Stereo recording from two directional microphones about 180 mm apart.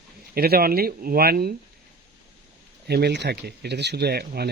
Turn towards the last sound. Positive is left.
turn(degrees=-60)  # may be behind; listen again after turning